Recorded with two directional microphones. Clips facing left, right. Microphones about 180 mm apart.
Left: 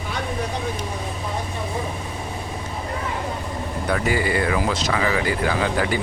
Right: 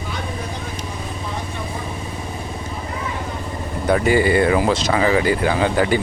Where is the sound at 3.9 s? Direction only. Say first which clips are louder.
Right 6 dB; 25° right (ahead or behind).